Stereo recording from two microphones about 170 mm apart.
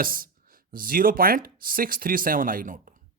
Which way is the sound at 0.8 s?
55° right (ahead or behind).